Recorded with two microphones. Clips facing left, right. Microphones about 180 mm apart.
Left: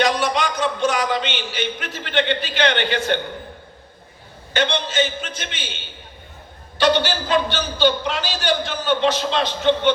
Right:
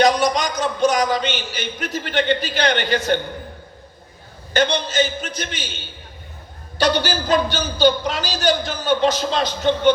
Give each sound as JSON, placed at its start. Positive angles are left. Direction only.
{"t": 0.0, "sound": "a man's voice", "side_deg": -40}
{"t": 4.5, "sound": "a man's voice", "side_deg": -40}